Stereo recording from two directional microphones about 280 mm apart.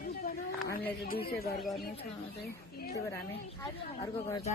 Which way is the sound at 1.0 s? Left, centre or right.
Left.